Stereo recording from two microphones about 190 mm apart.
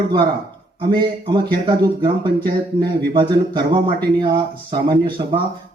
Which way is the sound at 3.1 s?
25° right (ahead or behind).